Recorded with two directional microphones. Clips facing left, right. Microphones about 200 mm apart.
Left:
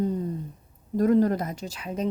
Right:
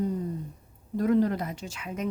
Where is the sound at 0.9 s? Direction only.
45° left (ahead or behind).